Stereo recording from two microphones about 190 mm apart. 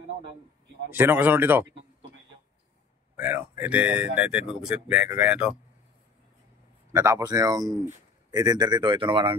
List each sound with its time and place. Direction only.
0.8 s speech: 10° right (ahead or behind)
3.2 s speech: 10° right (ahead or behind)
6.9 s speech: 15° right (ahead or behind)